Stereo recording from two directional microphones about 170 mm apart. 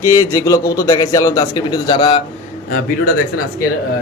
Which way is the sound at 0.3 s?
20° left (ahead or behind).